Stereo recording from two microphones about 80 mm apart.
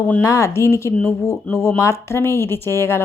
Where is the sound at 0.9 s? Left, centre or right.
Centre.